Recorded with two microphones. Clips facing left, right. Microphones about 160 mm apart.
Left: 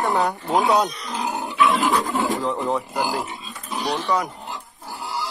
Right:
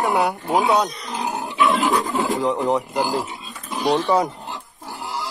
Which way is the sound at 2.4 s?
20° right (ahead or behind).